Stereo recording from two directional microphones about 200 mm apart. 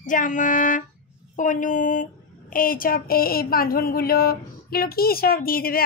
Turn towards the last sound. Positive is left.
turn(degrees=45)  # may be behind; listen again after turning